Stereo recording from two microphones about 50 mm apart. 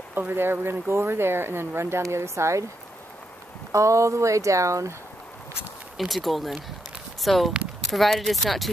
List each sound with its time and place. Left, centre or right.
0.3 s speech: right
3.7 s speech: right
5.9 s speech: centre